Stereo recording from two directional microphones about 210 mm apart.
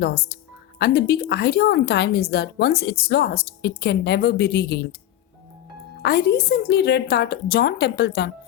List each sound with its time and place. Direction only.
0.0 s a woman's voice: 50° left (ahead or behind)
6.0 s a woman's voice: 50° left (ahead or behind)